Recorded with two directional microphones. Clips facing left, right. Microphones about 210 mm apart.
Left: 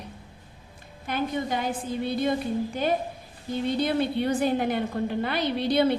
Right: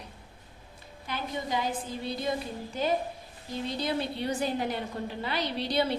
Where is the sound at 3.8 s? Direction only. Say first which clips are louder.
Left 6 dB; 55° left (ahead or behind).